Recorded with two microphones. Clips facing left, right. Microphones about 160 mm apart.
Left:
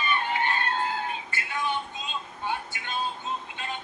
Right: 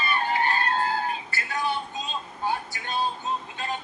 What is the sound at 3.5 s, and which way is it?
Music, 40° right (ahead or behind).